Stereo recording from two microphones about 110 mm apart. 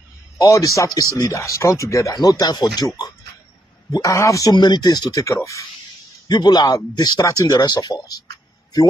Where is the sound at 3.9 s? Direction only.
30° left (ahead or behind).